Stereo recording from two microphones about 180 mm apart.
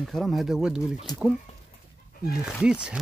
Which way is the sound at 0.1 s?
Centre (ahead or behind).